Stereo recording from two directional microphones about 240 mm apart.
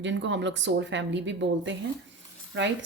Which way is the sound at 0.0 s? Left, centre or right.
Right.